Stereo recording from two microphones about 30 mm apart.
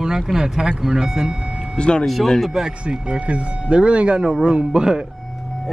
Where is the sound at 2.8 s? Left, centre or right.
Right.